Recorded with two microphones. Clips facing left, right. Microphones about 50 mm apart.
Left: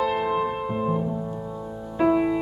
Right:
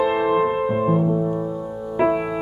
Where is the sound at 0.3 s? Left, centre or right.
Right.